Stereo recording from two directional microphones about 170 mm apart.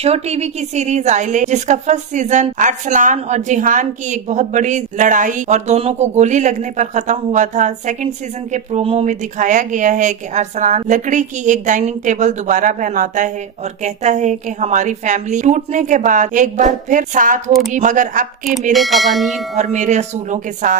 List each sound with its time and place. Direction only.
0.0 s a woman's voice: 40° right (ahead or behind)
17.5 s speech: centre (ahead or behind)
17.7 s a woman's voice: 50° right (ahead or behind)
18.7 s speech: centre (ahead or behind)
19.5 s a woman's voice: 45° right (ahead or behind)